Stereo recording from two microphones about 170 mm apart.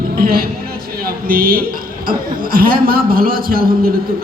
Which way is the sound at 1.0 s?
60° right (ahead or behind).